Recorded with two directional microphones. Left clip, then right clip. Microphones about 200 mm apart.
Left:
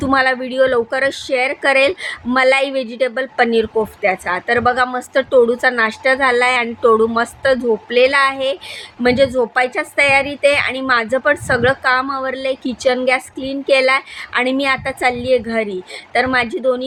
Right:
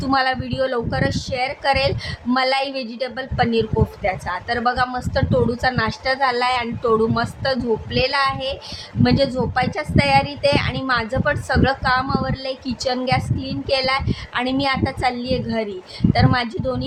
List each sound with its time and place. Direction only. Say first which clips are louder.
0.0 s speech: left 4 dB; 15° left (ahead or behind)